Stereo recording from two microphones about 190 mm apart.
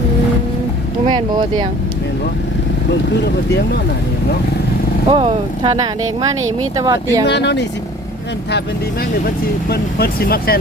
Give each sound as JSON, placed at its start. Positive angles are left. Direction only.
{"t": 1.0, "sound": "speech", "side_deg": -25}
{"t": 5.1, "sound": "speech", "side_deg": -30}
{"t": 7.3, "sound": "speech", "side_deg": 65}
{"t": 9.2, "sound": "speech", "side_deg": 55}